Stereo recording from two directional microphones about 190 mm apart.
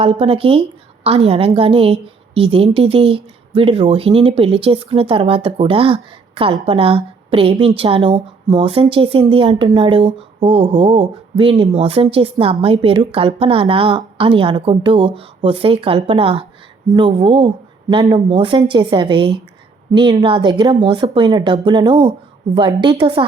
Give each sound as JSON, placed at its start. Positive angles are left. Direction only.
{"t": 0.0, "sound": "a woman's voice", "side_deg": -30}